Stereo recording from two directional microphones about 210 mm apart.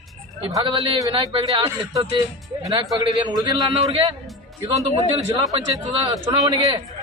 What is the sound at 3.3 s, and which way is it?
Speech, 25° right (ahead or behind).